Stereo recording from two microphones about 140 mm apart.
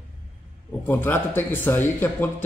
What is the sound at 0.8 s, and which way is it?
A man's voice, 15° left (ahead or behind).